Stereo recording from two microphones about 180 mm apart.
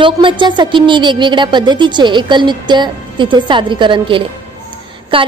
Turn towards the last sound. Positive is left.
turn(degrees=-30)  # may be behind; listen again after turning